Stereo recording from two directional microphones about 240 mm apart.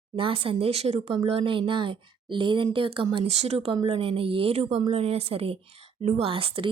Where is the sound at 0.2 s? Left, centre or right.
Right.